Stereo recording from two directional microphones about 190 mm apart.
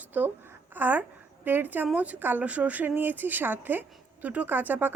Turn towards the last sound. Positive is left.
turn(degrees=-10)  # may be behind; listen again after turning